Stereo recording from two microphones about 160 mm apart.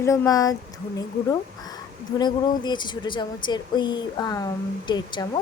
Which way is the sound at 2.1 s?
25° left (ahead or behind).